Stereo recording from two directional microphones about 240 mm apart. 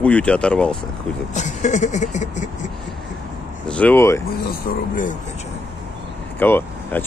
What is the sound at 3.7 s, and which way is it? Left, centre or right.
Speech, centre.